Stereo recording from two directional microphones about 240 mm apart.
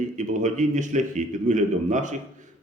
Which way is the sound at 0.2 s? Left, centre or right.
Right.